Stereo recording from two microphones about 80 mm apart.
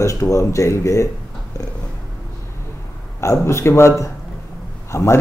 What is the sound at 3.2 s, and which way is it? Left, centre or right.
Speech, left.